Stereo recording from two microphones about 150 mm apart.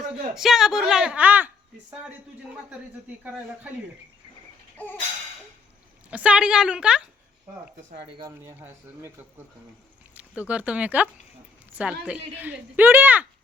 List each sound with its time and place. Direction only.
0.3 s a woman's voice: 5° right (ahead or behind)
6.1 s a woman's voice: 10° right (ahead or behind)
8.6 s a woman's voice: 15° right (ahead or behind)